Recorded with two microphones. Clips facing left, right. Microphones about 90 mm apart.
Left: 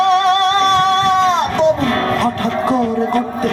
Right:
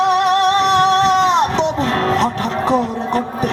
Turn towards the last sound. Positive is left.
turn(degrees=-20)  # may be behind; listen again after turning